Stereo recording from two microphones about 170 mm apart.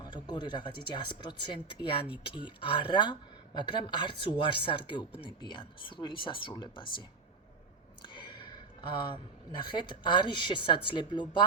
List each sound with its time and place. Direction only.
0.0 s speech: 25° left (ahead or behind)
8.0 s a sound: 25° left (ahead or behind)
9.6 s speech: 25° left (ahead or behind)